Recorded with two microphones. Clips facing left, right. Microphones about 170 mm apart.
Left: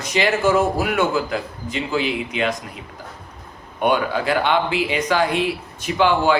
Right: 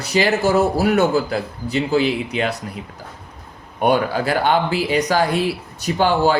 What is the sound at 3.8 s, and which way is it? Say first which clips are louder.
Speech: right 2 dB; 40° right (ahead or behind).